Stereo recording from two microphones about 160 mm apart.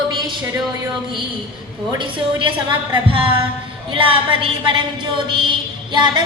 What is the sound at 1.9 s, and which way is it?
A woman's voice, 30° right (ahead or behind).